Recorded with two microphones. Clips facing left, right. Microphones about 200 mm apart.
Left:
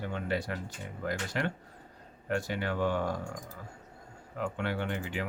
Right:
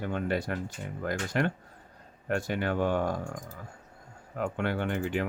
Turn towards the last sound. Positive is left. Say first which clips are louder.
# right 5 dB
turn(degrees=-50)  # may be behind; listen again after turning